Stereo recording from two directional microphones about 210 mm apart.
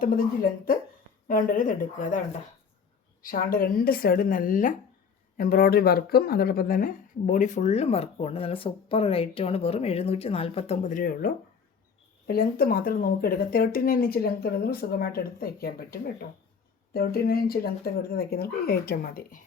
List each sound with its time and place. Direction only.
0.0 s speech: 45° left (ahead or behind)
12.3 s speech: 45° left (ahead or behind)